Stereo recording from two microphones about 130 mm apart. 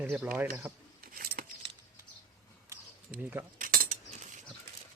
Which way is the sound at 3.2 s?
15° right (ahead or behind).